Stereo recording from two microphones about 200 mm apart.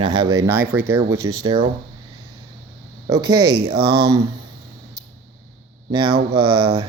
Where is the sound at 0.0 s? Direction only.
20° right (ahead or behind).